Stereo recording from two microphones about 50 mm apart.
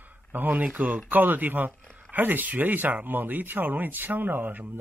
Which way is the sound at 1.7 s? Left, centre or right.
Centre.